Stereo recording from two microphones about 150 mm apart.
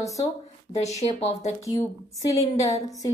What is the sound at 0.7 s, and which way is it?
Speech, 45° left (ahead or behind).